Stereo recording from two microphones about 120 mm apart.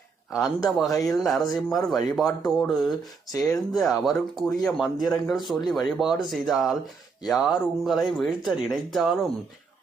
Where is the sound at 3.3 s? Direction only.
25° left (ahead or behind).